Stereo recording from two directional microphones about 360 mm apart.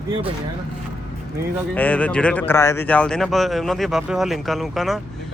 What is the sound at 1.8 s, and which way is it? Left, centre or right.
Speech, centre.